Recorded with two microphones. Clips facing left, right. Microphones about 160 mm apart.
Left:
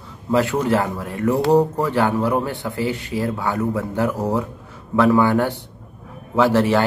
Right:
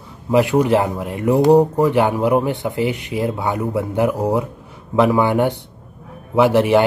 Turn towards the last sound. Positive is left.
turn(degrees=-15)  # may be behind; listen again after turning